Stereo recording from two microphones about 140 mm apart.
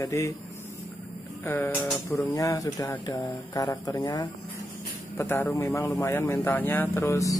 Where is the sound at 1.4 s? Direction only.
15° left (ahead or behind).